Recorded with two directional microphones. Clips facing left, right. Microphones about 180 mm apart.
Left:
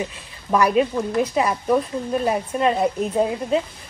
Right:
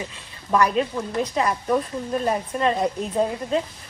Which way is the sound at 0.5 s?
10° left (ahead or behind).